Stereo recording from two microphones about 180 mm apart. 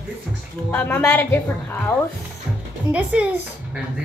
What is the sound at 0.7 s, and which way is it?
A woman's voice, 10° left (ahead or behind).